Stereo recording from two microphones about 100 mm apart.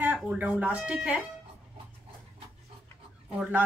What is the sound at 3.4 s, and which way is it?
Speech, 15° right (ahead or behind).